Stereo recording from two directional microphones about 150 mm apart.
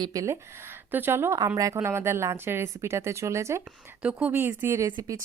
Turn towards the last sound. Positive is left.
turn(degrees=-20)  # may be behind; listen again after turning